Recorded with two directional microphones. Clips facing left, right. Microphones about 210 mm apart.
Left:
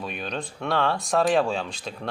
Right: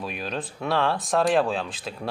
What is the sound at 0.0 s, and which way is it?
Speech, centre (ahead or behind).